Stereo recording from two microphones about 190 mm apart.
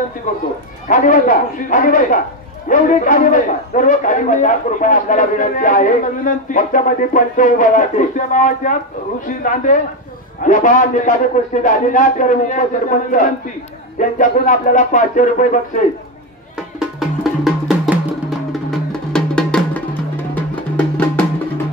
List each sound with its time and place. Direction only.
0.8 s a man's voice: 45° left (ahead or behind)
16.5 s music: centre (ahead or behind)